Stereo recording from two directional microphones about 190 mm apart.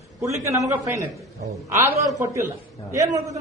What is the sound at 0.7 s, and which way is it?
A man's voice, 15° right (ahead or behind).